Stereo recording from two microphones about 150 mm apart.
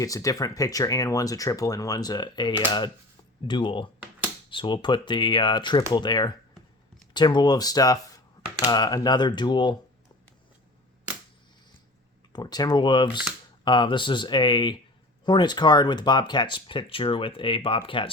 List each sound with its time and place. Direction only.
0.0 s speech: 20° left (ahead or behind)
12.3 s speech: 25° left (ahead or behind)